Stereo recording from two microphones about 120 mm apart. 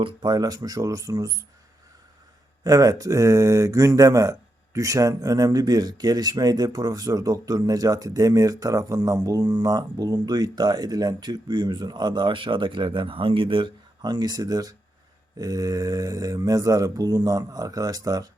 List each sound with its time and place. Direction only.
0.0 s speech: 40° right (ahead or behind)
2.6 s speech: 30° right (ahead or behind)